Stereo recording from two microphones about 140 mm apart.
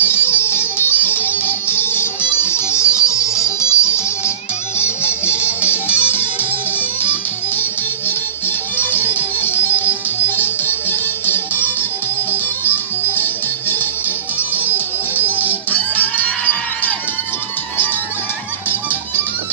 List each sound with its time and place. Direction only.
0.0 s music: 15° left (ahead or behind)
4.7 s music: 15° left (ahead or behind)
5.2 s music: 10° right (ahead or behind)
8.7 s music: 15° left (ahead or behind)
13.0 s music: 15° left (ahead or behind)
15.1 s music: 15° left (ahead or behind)